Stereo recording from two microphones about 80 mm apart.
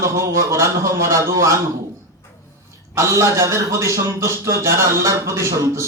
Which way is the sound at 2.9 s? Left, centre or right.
Right.